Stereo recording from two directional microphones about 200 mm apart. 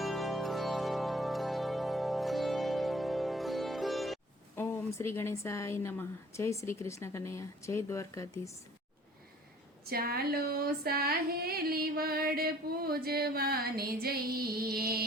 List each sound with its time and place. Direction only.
0.0 s music: centre (ahead or behind)
4.5 s speech: 10° left (ahead or behind)
9.8 s a sound: 50° right (ahead or behind)